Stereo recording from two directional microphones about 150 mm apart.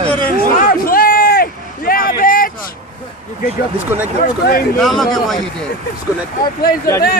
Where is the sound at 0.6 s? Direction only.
75° left (ahead or behind).